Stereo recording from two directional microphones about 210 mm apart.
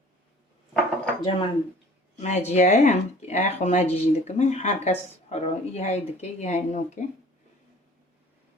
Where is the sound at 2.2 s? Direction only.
35° left (ahead or behind).